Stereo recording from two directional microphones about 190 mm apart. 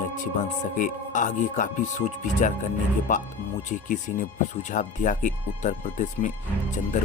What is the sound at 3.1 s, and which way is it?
Speech, 45° left (ahead or behind).